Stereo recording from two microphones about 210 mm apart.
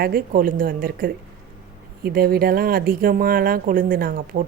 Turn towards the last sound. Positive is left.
turn(degrees=-40)  # may be behind; listen again after turning